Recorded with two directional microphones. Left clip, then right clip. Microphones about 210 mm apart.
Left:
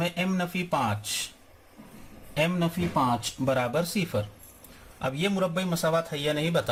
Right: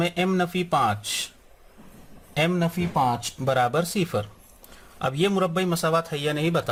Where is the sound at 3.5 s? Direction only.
50° right (ahead or behind).